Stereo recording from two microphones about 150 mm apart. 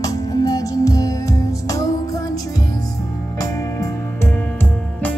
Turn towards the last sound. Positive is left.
turn(degrees=10)  # may be behind; listen again after turning